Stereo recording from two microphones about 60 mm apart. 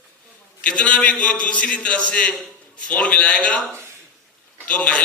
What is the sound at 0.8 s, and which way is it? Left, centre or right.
A man's voice, left.